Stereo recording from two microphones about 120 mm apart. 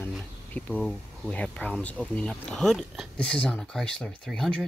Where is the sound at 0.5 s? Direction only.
10° left (ahead or behind).